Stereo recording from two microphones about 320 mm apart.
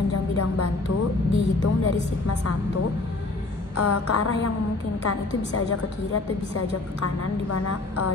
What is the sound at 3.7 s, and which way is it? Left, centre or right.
A woman's voice, left.